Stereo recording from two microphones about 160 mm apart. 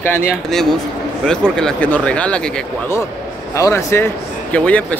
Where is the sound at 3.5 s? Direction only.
20° left (ahead or behind).